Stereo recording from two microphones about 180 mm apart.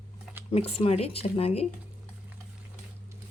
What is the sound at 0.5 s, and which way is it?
Speech, 35° left (ahead or behind).